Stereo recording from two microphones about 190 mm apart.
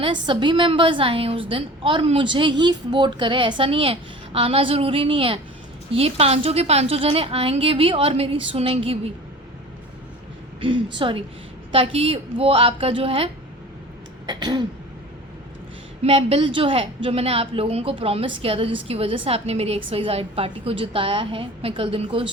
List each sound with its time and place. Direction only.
0.0 s a woman's voice: 25° right (ahead or behind)
10.9 s a woman's voice: 25° right (ahead or behind)
16.0 s a woman's voice: 30° right (ahead or behind)